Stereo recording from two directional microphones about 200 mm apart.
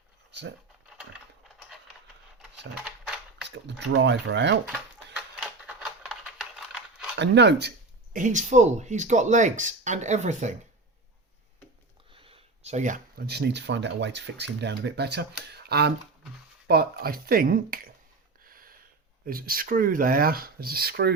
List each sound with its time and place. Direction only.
3.5 s speech: 65° right (ahead or behind)
4.6 s typewriter: 5° right (ahead or behind)
7.2 s speech: 60° right (ahead or behind)
8.1 s speech: 40° right (ahead or behind)
12.1 s speech: 30° right (ahead or behind); by 17.9 s 45° right (ahead or behind)
18.4 s a sound: 45° right (ahead or behind)
19.2 s speech: 45° right (ahead or behind)